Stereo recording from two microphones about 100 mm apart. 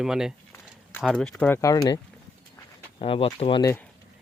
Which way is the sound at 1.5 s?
35° left (ahead or behind).